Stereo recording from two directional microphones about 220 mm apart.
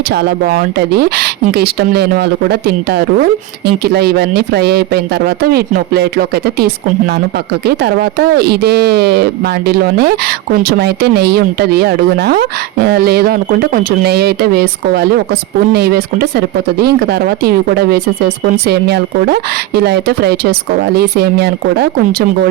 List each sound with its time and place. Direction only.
0.1 s speech: 45° right (ahead or behind)